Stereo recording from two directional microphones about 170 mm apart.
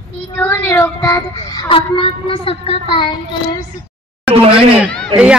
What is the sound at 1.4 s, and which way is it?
A woman's voice, 25° left (ahead or behind).